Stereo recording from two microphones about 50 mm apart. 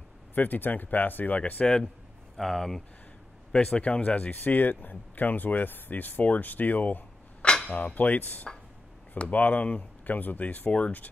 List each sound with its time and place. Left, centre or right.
0.3 s speech: left
1.4 s speech: left
2.3 s speech: centre
3.5 s speech: centre
3.8 s speech: left
7.4 s a sound: centre
7.7 s speech: left